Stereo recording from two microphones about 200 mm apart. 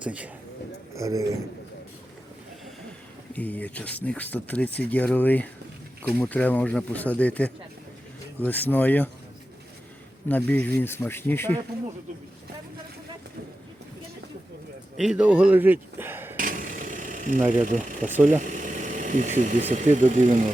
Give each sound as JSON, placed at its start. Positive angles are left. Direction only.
{"t": 0.0, "sound": "a man's voice", "side_deg": -5}
{"t": 3.3, "sound": "speech", "side_deg": 10}
{"t": 10.2, "sound": "speech", "side_deg": 10}
{"t": 14.9, "sound": "speech", "side_deg": -5}
{"t": 16.4, "sound": "vehicle", "side_deg": -40}
{"t": 17.5, "sound": "speech", "side_deg": -40}